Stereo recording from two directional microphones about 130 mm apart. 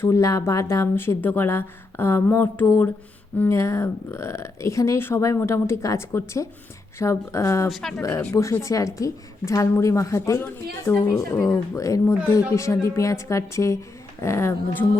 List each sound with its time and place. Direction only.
0.0 s speech: 25° left (ahead or behind)
7.7 s speech: 5° left (ahead or behind)
8.2 s speech: 20° left (ahead or behind)